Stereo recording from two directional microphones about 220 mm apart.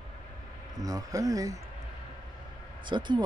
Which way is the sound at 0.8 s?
15° right (ahead or behind).